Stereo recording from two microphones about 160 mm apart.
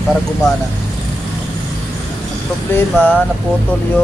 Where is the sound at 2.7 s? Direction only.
10° left (ahead or behind).